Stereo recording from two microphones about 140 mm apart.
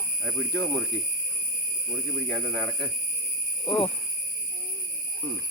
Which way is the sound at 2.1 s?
5° left (ahead or behind).